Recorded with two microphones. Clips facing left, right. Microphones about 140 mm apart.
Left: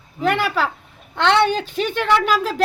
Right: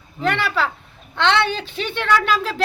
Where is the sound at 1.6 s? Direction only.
45° left (ahead or behind).